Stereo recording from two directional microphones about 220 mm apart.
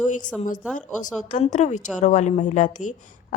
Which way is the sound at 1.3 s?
35° left (ahead or behind).